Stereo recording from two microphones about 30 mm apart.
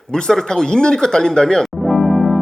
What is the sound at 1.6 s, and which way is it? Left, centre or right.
Music, centre.